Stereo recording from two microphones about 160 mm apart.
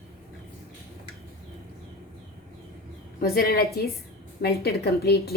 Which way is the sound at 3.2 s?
70° left (ahead or behind).